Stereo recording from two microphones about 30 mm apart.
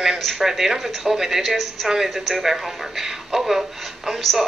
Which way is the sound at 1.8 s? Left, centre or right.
Centre.